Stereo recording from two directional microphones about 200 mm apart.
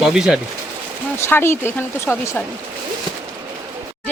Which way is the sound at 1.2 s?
10° left (ahead or behind).